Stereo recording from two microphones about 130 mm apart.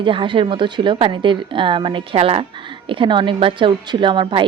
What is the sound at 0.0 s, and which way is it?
A woman's voice, 40° right (ahead or behind).